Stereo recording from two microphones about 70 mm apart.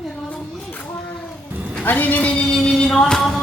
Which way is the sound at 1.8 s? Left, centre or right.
Left.